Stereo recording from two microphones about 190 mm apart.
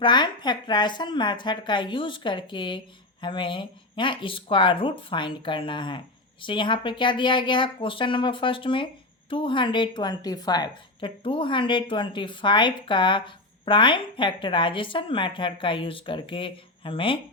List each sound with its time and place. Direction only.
0.0 s a woman's voice: 25° left (ahead or behind)